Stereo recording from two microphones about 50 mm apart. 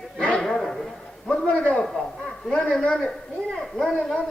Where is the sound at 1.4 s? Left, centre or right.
Left.